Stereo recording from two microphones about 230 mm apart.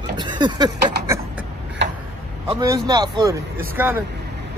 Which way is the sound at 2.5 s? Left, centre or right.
Centre.